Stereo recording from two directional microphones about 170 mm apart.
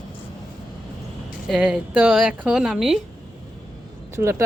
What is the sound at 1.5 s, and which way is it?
A woman's voice, 5° right (ahead or behind).